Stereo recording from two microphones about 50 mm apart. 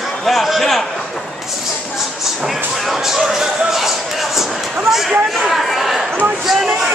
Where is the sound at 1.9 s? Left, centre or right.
Centre.